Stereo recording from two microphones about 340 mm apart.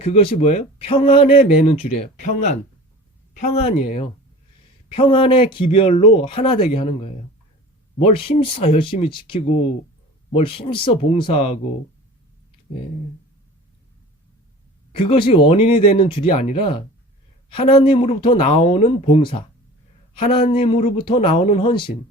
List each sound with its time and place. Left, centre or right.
0.0 s speech: centre
14.9 s speech: centre